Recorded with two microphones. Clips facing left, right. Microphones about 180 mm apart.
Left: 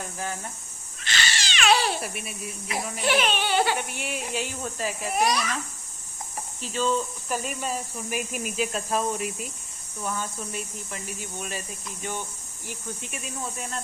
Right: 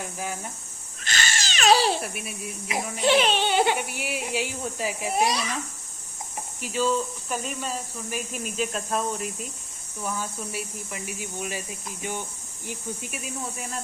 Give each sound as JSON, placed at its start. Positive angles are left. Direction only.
{"t": 1.0, "sound": "a sound", "side_deg": -45}
{"t": 2.0, "sound": "speech", "side_deg": 0}
{"t": 3.1, "sound": "speech", "side_deg": -30}
{"t": 3.8, "sound": "speech", "side_deg": -5}
{"t": 5.1, "sound": "speech", "side_deg": -25}
{"t": 6.6, "sound": "speech", "side_deg": -5}
{"t": 12.6, "sound": "speech", "side_deg": -10}